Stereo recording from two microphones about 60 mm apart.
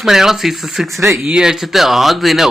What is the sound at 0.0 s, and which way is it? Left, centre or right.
Speech, centre.